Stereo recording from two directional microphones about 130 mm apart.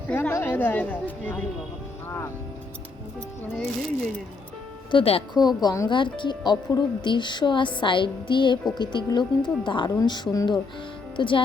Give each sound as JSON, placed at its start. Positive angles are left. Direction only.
{"t": 0.1, "sound": "speech", "side_deg": 15}
{"t": 3.5, "sound": "speech", "side_deg": 0}
{"t": 4.9, "sound": "speech", "side_deg": 45}
{"t": 5.3, "sound": "a woman's voice", "side_deg": 30}